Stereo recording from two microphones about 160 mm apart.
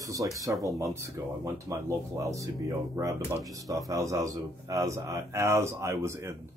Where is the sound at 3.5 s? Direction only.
20° right (ahead or behind).